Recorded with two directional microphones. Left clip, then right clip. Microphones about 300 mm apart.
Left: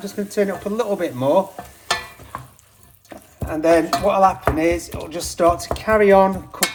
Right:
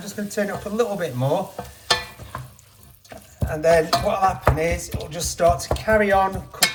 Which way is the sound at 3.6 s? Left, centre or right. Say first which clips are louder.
Left 2 dB; left.